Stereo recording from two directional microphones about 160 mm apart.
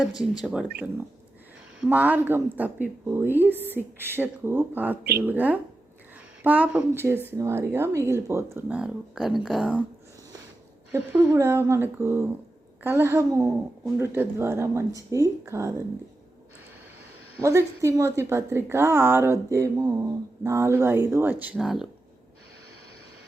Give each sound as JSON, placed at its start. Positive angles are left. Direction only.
{"t": 0.1, "sound": "speech", "side_deg": 25}
{"t": 1.8, "sound": "a woman's voice", "side_deg": -10}
{"t": 10.9, "sound": "a woman's voice", "side_deg": -15}
{"t": 17.4, "sound": "a woman's voice", "side_deg": -15}